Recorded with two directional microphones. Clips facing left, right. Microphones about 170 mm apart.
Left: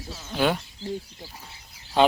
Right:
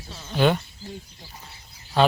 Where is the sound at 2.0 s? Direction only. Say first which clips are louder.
Even; 20° left (ahead or behind).